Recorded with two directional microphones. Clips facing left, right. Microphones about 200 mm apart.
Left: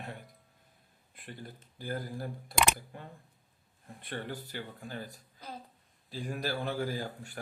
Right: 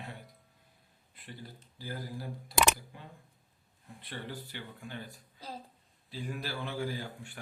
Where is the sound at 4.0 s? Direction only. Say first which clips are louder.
Left 3 dB; 50° left (ahead or behind).